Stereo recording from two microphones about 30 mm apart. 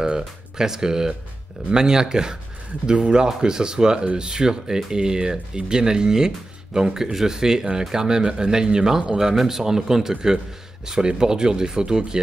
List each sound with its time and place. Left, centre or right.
0.6 s speech: right